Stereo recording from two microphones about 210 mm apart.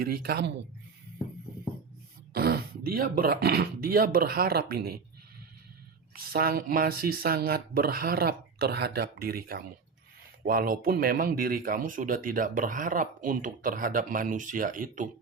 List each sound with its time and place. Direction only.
0.0 s speech: 45° right (ahead or behind)
2.3 s speech: 50° right (ahead or behind)
6.1 s speech: 45° right (ahead or behind)